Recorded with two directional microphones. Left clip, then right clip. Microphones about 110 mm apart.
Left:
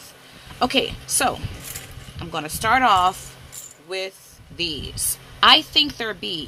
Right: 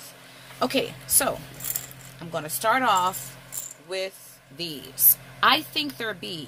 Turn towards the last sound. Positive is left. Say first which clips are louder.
# left 5 dB
turn(degrees=30)  # may be behind; listen again after turning